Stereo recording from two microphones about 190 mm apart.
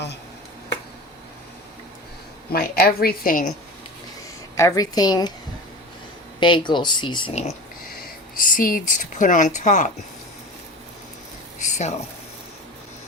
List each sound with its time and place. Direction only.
2.5 s speech: 55° left (ahead or behind)
4.5 s speech: 15° left (ahead or behind)
6.4 s speech: 25° left (ahead or behind)
8.4 s speech: 45° left (ahead or behind)
11.6 s a sound: 40° left (ahead or behind)